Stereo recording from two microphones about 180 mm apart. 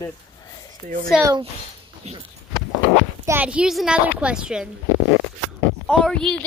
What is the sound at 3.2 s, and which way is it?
A woman's voice, 10° right (ahead or behind).